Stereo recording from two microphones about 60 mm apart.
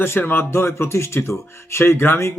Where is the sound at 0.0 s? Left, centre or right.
Left.